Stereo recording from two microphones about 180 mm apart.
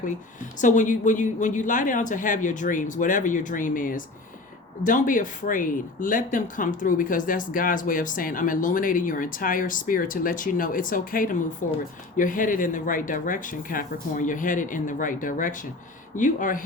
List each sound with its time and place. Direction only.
0.6 s speech: 45° left (ahead or behind)